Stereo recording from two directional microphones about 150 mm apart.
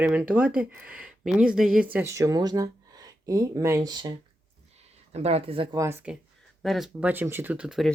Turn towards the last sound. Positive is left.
turn(degrees=-5)  # may be behind; listen again after turning